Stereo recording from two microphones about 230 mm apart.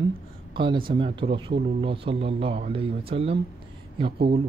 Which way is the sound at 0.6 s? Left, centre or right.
Right.